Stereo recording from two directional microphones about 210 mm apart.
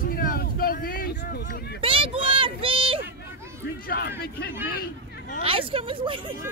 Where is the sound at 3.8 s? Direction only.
45° left (ahead or behind).